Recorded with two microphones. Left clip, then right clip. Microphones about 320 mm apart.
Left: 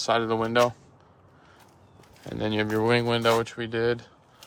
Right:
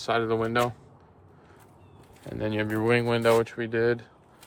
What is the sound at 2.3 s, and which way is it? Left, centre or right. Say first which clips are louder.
Speech: left 2 dB; centre.